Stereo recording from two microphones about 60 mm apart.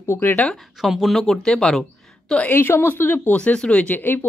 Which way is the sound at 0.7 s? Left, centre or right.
Centre.